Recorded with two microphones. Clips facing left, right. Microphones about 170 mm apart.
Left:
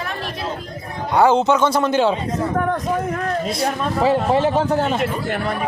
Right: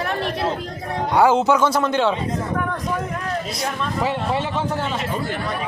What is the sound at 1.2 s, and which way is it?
Speech, 5° right (ahead or behind).